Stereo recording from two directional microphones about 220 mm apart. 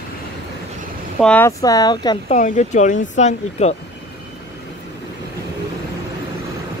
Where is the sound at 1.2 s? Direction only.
5° left (ahead or behind).